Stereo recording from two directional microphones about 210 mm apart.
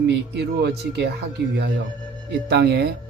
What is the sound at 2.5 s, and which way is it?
Speech, 50° right (ahead or behind).